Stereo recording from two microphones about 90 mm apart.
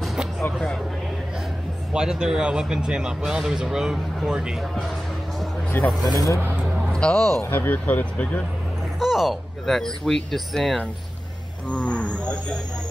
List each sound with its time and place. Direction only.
0.0 s a sound: 5° right (ahead or behind)
1.9 s speech: 5° right (ahead or behind)
5.9 s speech: centre (ahead or behind)
6.1 s speech: 40° left (ahead or behind)
6.4 s speech: 20° right (ahead or behind)
6.9 s a man's voice: 10° left (ahead or behind)
7.4 s speech: 20° left (ahead or behind)
9.0 s speech: centre (ahead or behind)
11.7 s cattle: 15° left (ahead or behind)